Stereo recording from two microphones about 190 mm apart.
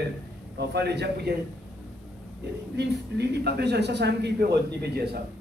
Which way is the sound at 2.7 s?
60° right (ahead or behind).